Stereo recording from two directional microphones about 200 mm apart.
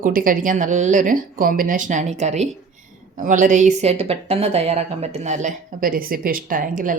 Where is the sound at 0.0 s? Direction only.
45° right (ahead or behind).